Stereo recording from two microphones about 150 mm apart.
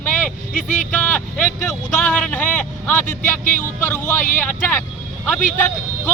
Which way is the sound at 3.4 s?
55° left (ahead or behind).